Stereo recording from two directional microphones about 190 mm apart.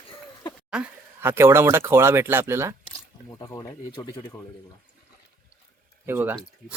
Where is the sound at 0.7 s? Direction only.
5° right (ahead or behind).